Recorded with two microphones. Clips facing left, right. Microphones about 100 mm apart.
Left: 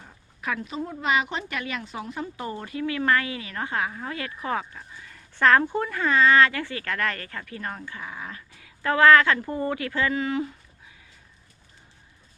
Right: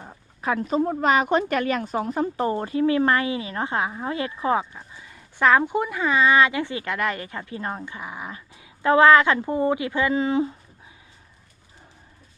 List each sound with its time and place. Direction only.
0.6 s speech: 45° right (ahead or behind); by 10.5 s 25° right (ahead or behind)